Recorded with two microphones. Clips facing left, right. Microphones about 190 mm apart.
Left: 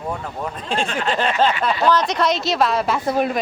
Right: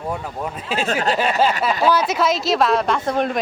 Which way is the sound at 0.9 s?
40° right (ahead or behind).